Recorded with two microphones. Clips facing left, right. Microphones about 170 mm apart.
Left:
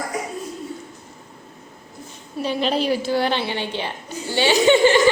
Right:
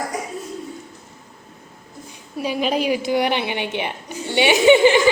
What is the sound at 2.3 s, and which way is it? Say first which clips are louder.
A woman's voice: even; 10° right (ahead or behind).